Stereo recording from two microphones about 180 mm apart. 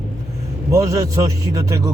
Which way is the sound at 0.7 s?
15° right (ahead or behind).